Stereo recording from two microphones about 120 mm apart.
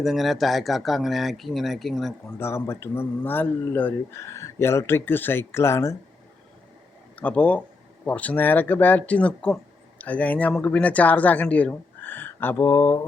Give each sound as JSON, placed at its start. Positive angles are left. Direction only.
{"t": 0.0, "sound": "speech", "side_deg": 0}
{"t": 2.4, "sound": "speech", "side_deg": 20}
{"t": 7.2, "sound": "speech", "side_deg": 10}